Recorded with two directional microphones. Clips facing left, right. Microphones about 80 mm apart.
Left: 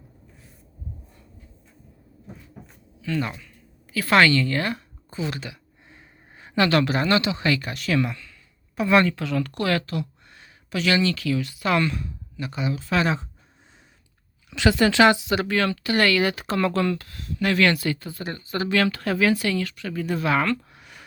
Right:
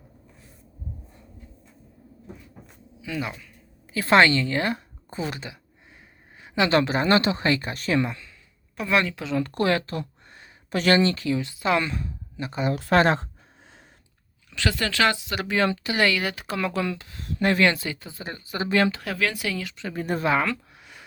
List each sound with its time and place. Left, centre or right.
3.0 s speech: centre
3.9 s speech: right
5.9 s a sound: centre
6.6 s speech: right
8.7 s speech: centre
9.1 s speech: right
12.6 s speech: right
14.5 s speech: centre
15.4 s speech: right
16.2 s speech: centre
17.4 s speech: right
19.0 s speech: centre
19.9 s speech: right
20.2 s speech: centre